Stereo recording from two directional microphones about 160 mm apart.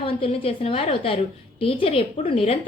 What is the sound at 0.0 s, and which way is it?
A woman's voice, 35° left (ahead or behind).